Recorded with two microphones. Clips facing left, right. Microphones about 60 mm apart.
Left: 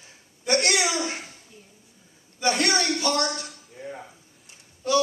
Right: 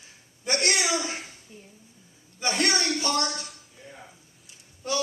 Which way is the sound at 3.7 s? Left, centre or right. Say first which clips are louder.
Left 12 dB; left.